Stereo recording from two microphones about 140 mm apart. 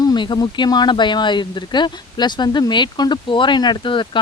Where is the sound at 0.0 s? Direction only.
30° left (ahead or behind).